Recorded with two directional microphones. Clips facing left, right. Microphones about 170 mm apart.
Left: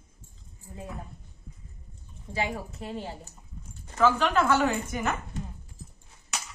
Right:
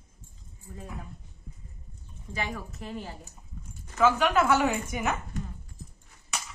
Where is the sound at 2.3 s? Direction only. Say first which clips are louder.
Left 3 dB; 30° left (ahead or behind).